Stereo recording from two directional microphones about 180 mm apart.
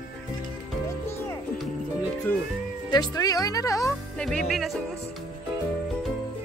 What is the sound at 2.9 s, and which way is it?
Speech, 20° left (ahead or behind).